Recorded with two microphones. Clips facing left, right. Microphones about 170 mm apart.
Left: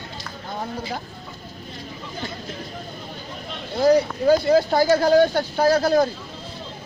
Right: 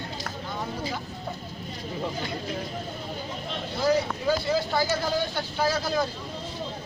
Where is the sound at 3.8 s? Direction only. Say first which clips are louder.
Left 8 dB; 40° left (ahead or behind).